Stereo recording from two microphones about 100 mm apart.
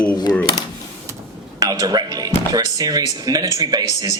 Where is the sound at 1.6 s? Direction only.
40° right (ahead or behind).